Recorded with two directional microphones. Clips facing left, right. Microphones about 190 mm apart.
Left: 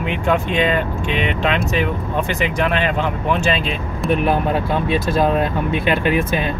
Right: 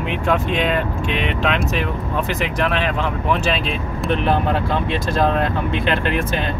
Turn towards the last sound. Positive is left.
turn(degrees=10)  # may be behind; listen again after turning